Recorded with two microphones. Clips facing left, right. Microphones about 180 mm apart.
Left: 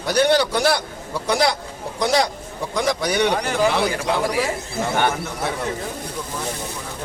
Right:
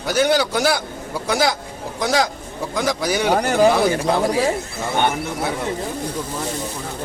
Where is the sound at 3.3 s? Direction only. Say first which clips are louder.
Right 4 dB; 45° right (ahead or behind).